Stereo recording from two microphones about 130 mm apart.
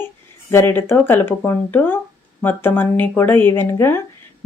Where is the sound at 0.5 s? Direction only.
15° left (ahead or behind).